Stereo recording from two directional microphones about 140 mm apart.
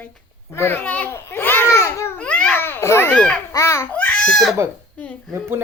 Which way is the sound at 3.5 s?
20° left (ahead or behind).